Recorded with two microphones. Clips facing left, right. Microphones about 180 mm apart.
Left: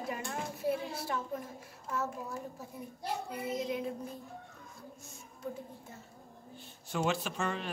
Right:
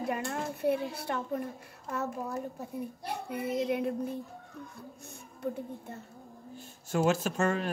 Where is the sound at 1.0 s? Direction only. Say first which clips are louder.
Right 4 dB; 65° right (ahead or behind).